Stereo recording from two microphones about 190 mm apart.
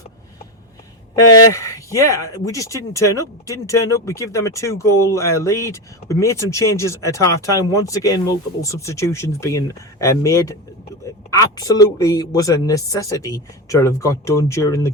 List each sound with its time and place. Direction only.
1.1 s a man's voice: 15° left (ahead or behind)